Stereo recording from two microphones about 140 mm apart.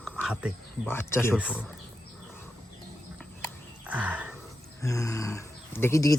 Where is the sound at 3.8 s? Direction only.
10° right (ahead or behind).